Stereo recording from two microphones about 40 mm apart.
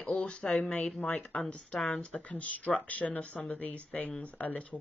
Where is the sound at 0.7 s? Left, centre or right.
Left.